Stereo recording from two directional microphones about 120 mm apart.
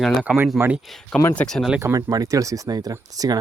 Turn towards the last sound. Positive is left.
turn(degrees=-30)  # may be behind; listen again after turning